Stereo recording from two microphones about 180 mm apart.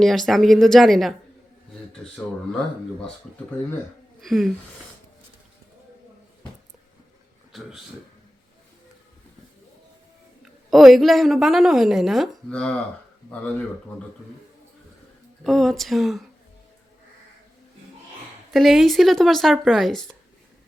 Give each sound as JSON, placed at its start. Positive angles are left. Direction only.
{"t": 0.0, "sound": "a woman's voice", "side_deg": 0}
{"t": 4.2, "sound": "a woman's voice", "side_deg": 0}
{"t": 10.7, "sound": "a woman's voice", "side_deg": 0}
{"t": 15.4, "sound": "a woman's voice", "side_deg": 0}
{"t": 18.5, "sound": "a woman's voice", "side_deg": 0}